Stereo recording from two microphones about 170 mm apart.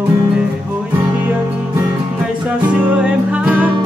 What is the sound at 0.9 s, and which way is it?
Music, 10° right (ahead or behind).